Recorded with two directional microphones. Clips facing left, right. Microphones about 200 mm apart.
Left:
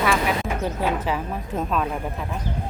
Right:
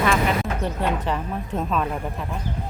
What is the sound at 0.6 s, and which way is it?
Speech, 5° left (ahead or behind).